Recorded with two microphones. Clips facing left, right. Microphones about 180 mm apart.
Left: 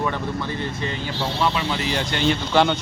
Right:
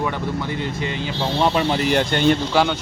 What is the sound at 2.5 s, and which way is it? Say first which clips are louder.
Speech: even; 5° right (ahead or behind).